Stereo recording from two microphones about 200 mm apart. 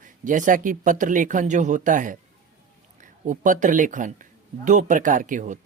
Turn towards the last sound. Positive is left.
turn(degrees=-40)  # may be behind; listen again after turning